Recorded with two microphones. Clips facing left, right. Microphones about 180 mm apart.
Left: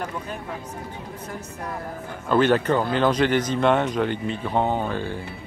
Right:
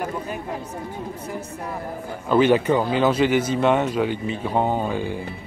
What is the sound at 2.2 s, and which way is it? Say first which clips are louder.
Speech: right 2 dB; 10° right (ahead or behind).